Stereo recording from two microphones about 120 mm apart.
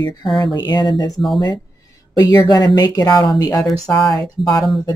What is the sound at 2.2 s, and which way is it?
Speech, 35° left (ahead or behind).